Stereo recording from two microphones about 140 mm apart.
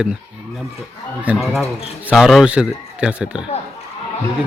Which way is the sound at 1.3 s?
10° right (ahead or behind).